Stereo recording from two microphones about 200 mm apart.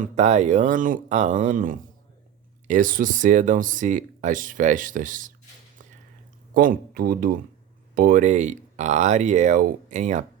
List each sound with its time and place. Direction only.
0.0 s speech: 35° right (ahead or behind)
6.5 s speech: 45° right (ahead or behind)